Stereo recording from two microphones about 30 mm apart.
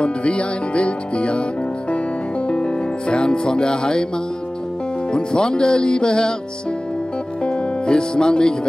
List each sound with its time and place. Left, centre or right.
0.0 s speech: left
2.4 s music: left
5.1 s speech: left
7.8 s speech: left